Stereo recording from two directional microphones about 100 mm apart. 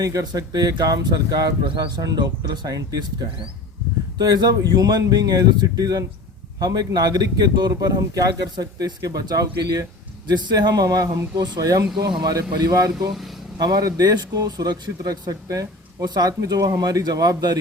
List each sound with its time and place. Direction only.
0.0 s speech: 40° right (ahead or behind)
1.6 s speech: 55° right (ahead or behind)
2.0 s speech: 40° right (ahead or behind)